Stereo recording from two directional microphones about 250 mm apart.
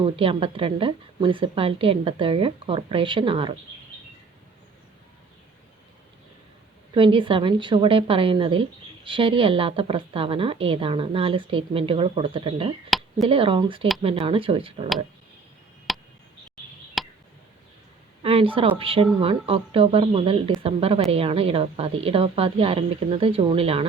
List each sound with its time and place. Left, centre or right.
0.0 s speech: right
6.9 s speech: centre
12.9 s a sound: centre
13.2 s speech: right
15.9 s a sound: centre
18.2 s speech: right